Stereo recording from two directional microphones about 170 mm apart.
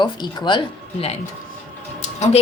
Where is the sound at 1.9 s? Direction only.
40° left (ahead or behind).